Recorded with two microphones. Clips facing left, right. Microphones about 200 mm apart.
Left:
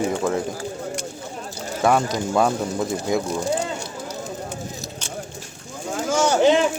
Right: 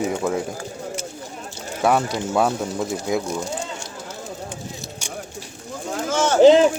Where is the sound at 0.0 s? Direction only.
5° right (ahead or behind).